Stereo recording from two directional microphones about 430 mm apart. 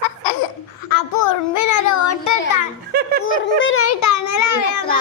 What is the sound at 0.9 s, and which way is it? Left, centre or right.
Child singing, left.